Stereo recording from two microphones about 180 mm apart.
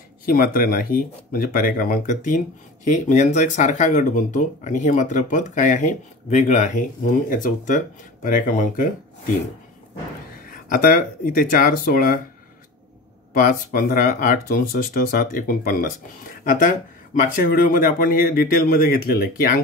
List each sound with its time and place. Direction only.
0.3 s speech: 55° left (ahead or behind)
10.7 s speech: 50° left (ahead or behind)
13.3 s speech: 50° left (ahead or behind)